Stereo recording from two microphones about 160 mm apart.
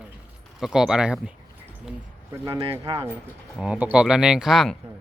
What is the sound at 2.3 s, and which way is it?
Speech, 20° right (ahead or behind).